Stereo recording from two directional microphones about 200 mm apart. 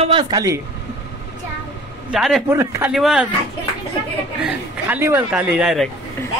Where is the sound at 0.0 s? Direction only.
25° right (ahead or behind).